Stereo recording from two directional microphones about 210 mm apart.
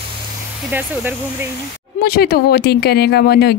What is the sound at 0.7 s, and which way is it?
Speech, 10° right (ahead or behind).